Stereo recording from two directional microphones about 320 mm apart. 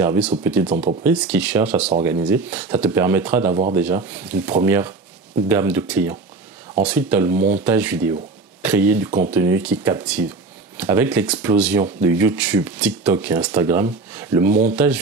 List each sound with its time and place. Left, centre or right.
0.0 s speech: centre
7.3 s speech: right
7.6 s speech: centre